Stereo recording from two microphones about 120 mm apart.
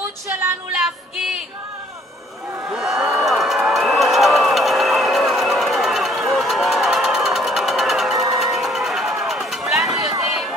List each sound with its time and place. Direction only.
0.7 s music: 5° right (ahead or behind)
2.7 s a sound: 5° right (ahead or behind)
10.2 s run: centre (ahead or behind)